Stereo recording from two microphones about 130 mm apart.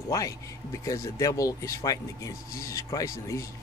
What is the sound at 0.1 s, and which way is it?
Speech, 25° left (ahead or behind).